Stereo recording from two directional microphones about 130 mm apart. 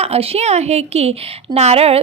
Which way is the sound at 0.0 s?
50° right (ahead or behind).